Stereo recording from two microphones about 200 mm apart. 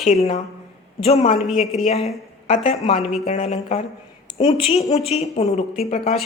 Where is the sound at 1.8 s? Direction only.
30° left (ahead or behind).